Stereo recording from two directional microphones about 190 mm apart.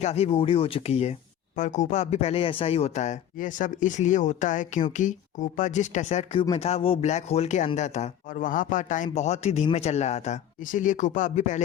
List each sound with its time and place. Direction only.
0.0 s speech: 35° left (ahead or behind)